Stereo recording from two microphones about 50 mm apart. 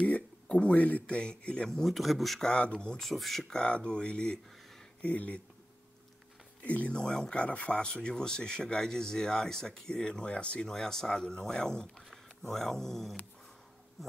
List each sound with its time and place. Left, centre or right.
0.0 s speech: left; by 2.0 s centre
2.0 s speech: centre
2.4 s speech: left
3.0 s speech: centre
3.5 s speech: left
6.6 s speech: left
7.0 s speech: centre
7.3 s speech: left
10.7 s speech: centre